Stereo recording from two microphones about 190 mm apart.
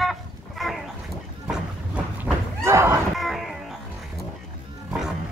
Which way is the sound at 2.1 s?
10° right (ahead or behind).